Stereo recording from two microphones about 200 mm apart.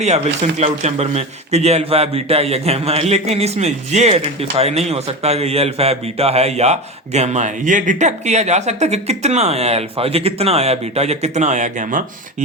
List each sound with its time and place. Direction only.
0.6 s a man's voice: 35° right (ahead or behind)